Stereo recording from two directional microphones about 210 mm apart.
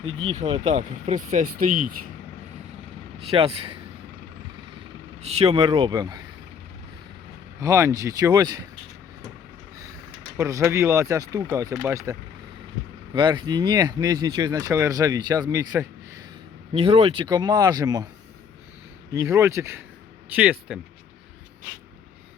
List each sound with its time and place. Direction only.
0.1 s speech: 75° right (ahead or behind)
0.3 s speech: 30° right (ahead or behind)
1.5 s speech: 90° right
3.2 s speech: 25° right (ahead or behind)
5.2 s speech: 30° right (ahead or behind)
7.6 s speech: 15° right (ahead or behind)
10.3 s speech: 15° right (ahead or behind)
13.1 s speech: 20° right (ahead or behind)
19.1 s speech: 15° right (ahead or behind)